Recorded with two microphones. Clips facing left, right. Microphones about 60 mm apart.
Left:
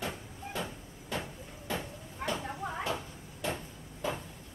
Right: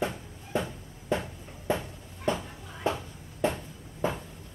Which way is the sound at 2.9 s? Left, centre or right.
Right.